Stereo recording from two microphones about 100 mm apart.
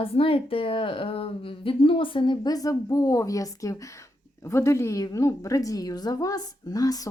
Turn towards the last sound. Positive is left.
turn(degrees=40)  # may be behind; listen again after turning